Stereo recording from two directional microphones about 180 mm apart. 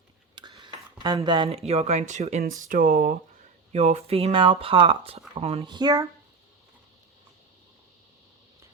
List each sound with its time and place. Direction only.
0.6 s speech: 25° right (ahead or behind); by 3.2 s 50° right (ahead or behind)
3.7 s speech: 35° right (ahead or behind); by 6.1 s 20° right (ahead or behind)